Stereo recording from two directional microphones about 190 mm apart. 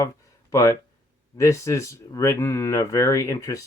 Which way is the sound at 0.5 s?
15° left (ahead or behind).